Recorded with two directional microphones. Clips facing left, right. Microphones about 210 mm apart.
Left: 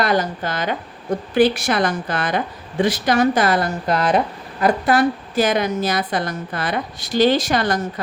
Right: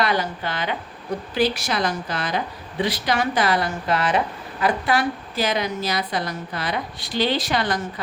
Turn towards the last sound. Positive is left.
turn(degrees=45)  # may be behind; listen again after turning